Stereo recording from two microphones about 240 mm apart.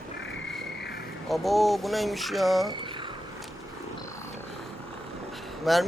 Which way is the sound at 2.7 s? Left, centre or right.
Centre.